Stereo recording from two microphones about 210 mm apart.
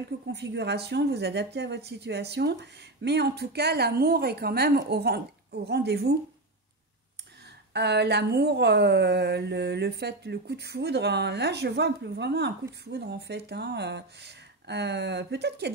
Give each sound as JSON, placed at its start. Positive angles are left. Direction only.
{"t": 0.3, "sound": "speech", "side_deg": -55}
{"t": 7.7, "sound": "speech", "side_deg": -50}